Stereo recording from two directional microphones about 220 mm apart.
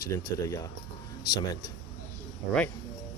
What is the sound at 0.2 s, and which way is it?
Speech, 15° left (ahead or behind).